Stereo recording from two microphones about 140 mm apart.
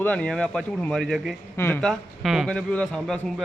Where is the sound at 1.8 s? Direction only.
Centre (ahead or behind).